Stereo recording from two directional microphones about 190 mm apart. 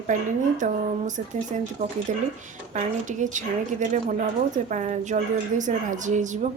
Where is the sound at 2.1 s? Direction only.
40° right (ahead or behind).